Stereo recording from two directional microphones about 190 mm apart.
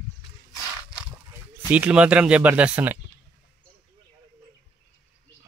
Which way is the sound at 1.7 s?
5° right (ahead or behind).